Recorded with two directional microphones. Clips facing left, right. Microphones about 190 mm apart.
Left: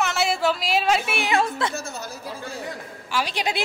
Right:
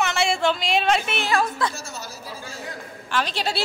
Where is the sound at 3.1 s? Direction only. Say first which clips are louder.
Even; 10° left (ahead or behind).